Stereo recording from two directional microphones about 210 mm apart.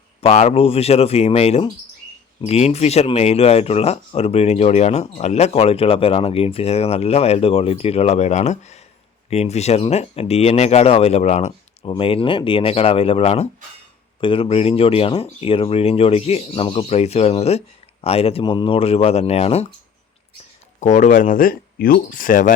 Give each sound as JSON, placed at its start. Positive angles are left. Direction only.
{"t": 0.2, "sound": "speech", "side_deg": 30}
{"t": 20.7, "sound": "speech", "side_deg": 35}